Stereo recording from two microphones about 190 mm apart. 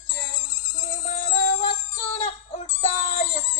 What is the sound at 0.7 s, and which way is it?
Music, 30° left (ahead or behind).